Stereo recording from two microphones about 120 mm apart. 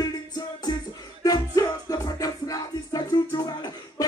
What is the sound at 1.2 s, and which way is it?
Music, 30° left (ahead or behind).